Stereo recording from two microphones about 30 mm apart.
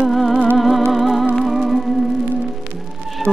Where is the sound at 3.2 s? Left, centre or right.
Centre.